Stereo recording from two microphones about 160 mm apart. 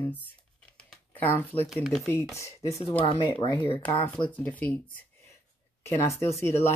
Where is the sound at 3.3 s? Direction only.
35° left (ahead or behind).